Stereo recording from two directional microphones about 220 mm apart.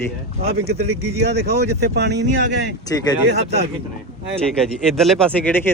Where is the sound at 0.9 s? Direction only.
90° right.